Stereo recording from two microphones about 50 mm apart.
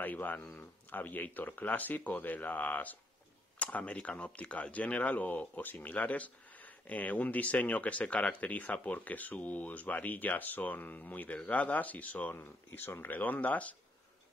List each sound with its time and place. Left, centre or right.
0.0 s speech: left
12.4 s speech: left